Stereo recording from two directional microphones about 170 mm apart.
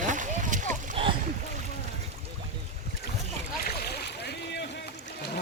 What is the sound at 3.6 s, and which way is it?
Boat, 70° left (ahead or behind).